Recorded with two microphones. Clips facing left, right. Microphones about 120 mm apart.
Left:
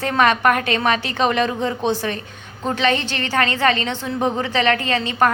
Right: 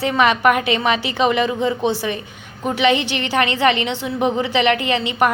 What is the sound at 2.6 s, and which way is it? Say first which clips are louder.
A woman's voice: right 3 dB; 15° right (ahead or behind).